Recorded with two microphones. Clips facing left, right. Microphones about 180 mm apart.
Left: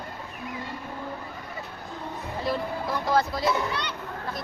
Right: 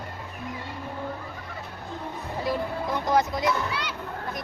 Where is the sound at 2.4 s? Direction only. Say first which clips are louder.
Right 1 dB; 15° right (ahead or behind).